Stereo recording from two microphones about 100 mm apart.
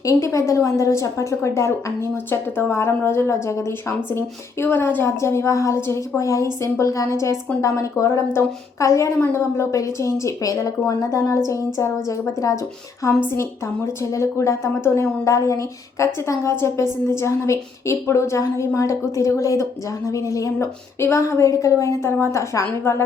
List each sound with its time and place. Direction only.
0.0 s a woman's voice: 30° left (ahead or behind)